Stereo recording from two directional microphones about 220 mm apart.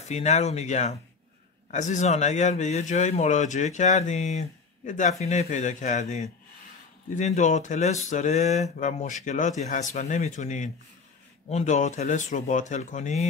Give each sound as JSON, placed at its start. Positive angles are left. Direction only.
{"t": 0.0, "sound": "speech", "side_deg": 30}